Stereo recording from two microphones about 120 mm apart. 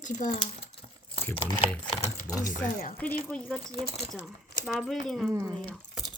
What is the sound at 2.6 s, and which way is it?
Speech, 15° left (ahead or behind).